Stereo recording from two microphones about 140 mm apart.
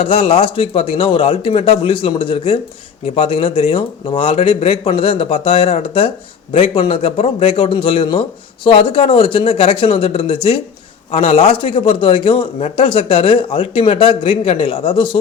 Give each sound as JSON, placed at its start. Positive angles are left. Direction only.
{"t": 0.0, "sound": "a man's voice", "side_deg": 45}